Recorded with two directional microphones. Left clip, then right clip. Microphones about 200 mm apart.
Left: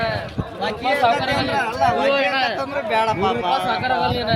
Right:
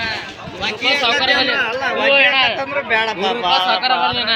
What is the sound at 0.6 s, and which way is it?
Speech, 55° left (ahead or behind).